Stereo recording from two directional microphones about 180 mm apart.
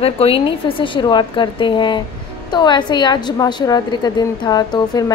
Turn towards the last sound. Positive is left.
turn(degrees=25)  # may be behind; listen again after turning